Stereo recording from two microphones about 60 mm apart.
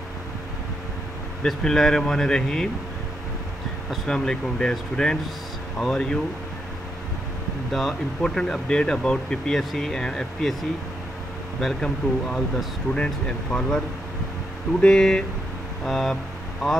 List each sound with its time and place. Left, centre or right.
1.6 s speech: centre
4.1 s speech: centre
7.7 s speech: centre
11.6 s speech: centre